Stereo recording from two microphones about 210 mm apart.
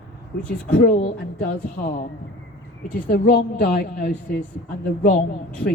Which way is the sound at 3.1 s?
45° left (ahead or behind).